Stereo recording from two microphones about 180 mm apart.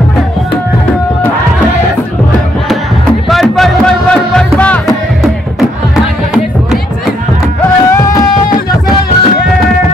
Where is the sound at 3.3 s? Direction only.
Centre (ahead or behind).